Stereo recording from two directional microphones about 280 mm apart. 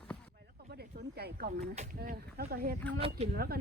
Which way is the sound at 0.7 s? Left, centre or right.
Right.